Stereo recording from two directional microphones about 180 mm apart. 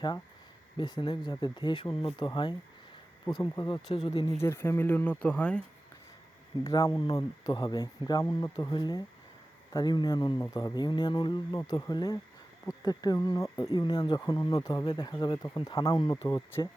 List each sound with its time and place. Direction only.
0.8 s speech: 25° left (ahead or behind)
4.3 s speech: 15° left (ahead or behind)
6.7 s speech: 20° left (ahead or behind)